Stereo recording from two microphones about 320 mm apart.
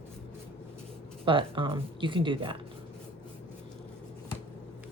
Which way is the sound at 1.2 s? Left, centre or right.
Centre.